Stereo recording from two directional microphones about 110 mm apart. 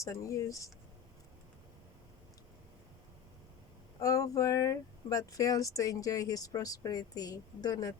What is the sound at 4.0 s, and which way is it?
Speech, 30° left (ahead or behind).